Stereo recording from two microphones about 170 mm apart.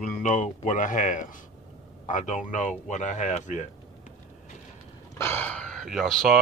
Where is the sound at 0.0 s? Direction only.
45° left (ahead or behind).